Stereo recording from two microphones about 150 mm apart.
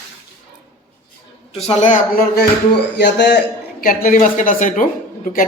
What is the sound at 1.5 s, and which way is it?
Speech, 45° left (ahead or behind).